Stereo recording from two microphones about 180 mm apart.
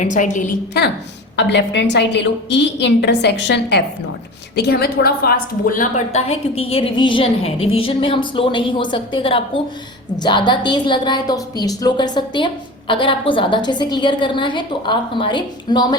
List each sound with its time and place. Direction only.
0.0 s a woman's voice: 45° left (ahead or behind)
1.4 s a woman's voice: 75° left (ahead or behind)
4.5 s a woman's voice: 60° left (ahead or behind); by 16.0 s 25° left (ahead or behind)